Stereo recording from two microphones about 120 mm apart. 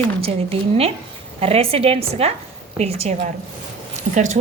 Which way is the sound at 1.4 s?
55° right (ahead or behind).